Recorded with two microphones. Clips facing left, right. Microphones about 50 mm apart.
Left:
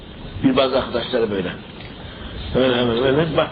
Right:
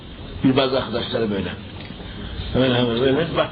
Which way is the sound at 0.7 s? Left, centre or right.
Centre.